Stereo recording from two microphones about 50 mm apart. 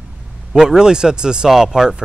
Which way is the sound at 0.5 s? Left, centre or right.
Centre.